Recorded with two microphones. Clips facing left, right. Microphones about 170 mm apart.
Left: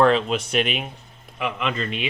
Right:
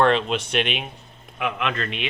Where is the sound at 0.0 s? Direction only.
Centre (ahead or behind).